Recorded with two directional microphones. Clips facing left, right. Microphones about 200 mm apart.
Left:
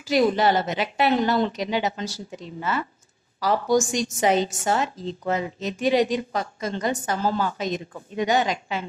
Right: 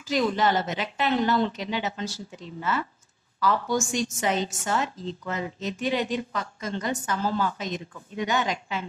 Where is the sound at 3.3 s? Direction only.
40° left (ahead or behind).